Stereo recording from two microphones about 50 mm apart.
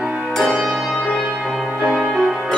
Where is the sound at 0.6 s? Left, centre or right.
Centre.